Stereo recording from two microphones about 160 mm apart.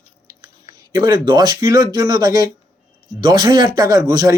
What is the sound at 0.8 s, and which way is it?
Speech, 20° right (ahead or behind).